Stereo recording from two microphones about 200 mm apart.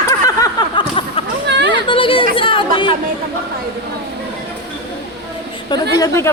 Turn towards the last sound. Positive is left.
turn(degrees=15)  # may be behind; listen again after turning